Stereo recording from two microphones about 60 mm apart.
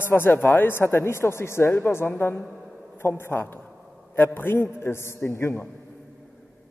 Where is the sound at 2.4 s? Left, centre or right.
Centre.